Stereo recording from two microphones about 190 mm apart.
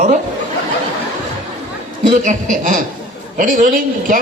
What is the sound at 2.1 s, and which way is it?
A woman's voice, 40° right (ahead or behind).